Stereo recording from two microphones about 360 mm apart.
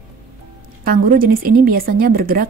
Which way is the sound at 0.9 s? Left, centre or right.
Right.